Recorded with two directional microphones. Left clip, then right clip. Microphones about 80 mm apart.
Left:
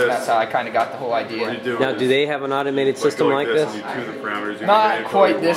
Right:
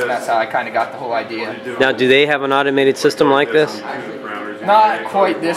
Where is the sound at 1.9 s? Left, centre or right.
Right.